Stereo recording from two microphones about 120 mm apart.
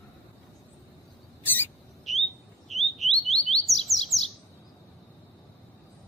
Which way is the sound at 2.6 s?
Centre (ahead or behind).